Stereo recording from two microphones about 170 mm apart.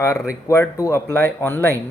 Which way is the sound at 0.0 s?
20° left (ahead or behind).